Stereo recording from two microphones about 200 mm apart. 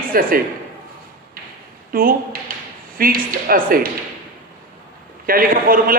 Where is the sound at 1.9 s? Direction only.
45° right (ahead or behind).